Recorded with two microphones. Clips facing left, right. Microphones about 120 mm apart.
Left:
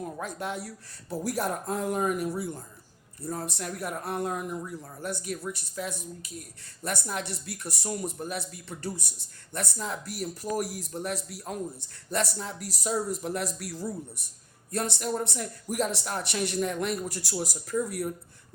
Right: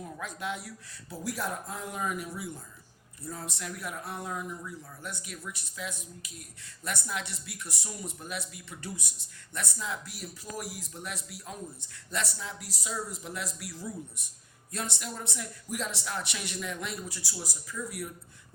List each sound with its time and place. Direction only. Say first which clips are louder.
0.3 s speech: left 2 dB; 35° left (ahead or behind)
4.0 s speech: left 7 dB; 60° left (ahead or behind)
14.8 s speech: left 8 dB; 45° left (ahead or behind)